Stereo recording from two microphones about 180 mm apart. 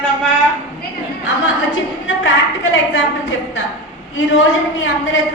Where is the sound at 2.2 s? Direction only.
90° left.